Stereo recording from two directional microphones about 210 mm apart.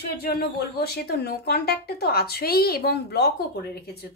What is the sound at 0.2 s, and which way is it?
Speech, 50° left (ahead or behind).